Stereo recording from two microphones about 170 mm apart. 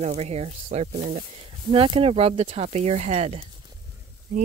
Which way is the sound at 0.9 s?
50° right (ahead or behind).